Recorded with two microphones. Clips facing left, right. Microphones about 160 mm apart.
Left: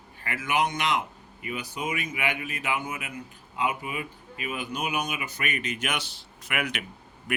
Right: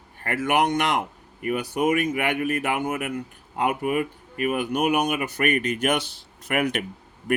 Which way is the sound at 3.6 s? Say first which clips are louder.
Right 7 dB; 60° right (ahead or behind).